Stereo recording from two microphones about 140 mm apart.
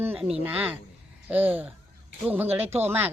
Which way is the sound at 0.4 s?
10° right (ahead or behind).